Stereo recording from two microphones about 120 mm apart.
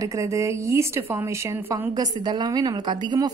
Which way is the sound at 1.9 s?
35° right (ahead or behind).